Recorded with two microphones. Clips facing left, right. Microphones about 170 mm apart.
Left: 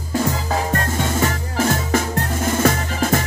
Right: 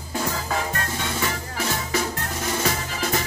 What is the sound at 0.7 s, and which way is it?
Music, 45° left (ahead or behind).